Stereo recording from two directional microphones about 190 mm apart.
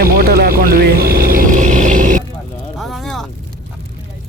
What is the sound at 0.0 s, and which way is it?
Vehicle, 50° right (ahead or behind).